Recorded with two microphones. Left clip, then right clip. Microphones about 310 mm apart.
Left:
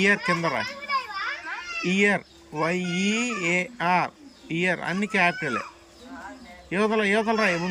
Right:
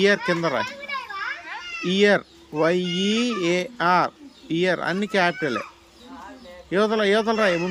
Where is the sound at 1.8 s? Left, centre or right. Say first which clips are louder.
Right 4 dB; centre.